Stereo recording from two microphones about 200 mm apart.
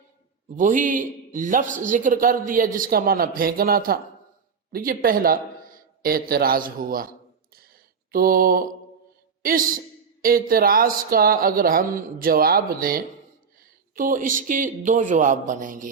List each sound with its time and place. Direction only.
0.5 s a man's voice: 40° right (ahead or behind)
7.5 s a sound: 45° right (ahead or behind)
9.4 s a woman's voice: 45° right (ahead or behind)